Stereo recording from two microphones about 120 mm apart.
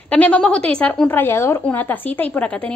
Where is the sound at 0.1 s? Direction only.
10° left (ahead or behind).